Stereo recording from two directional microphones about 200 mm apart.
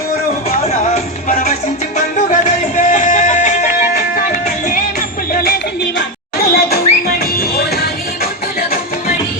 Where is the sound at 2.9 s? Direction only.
40° left (ahead or behind).